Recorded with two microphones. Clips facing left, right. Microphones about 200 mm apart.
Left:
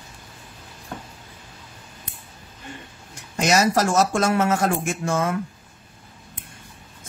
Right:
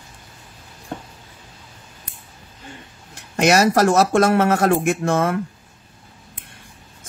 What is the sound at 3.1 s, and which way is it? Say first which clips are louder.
Speech: right 4 dB; 60° right (ahead or behind).